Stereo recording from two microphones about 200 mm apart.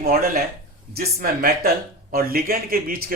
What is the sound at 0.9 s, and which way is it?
Speech, 50° right (ahead or behind).